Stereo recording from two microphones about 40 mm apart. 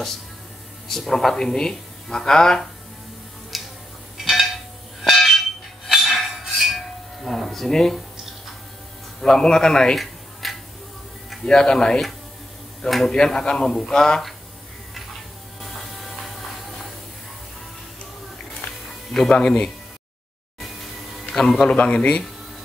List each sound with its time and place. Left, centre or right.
0.8 s speech: centre
3.5 s a sound: centre
5.9 s music: centre
7.2 s speech: centre
9.2 s speech: centre
10.4 s a sound: centre
11.4 s speech: centre
12.8 s a man's voice: centre
13.1 s speech: centre
19.3 s speech: left
21.3 s a man's voice: centre
21.5 s a man's voice: left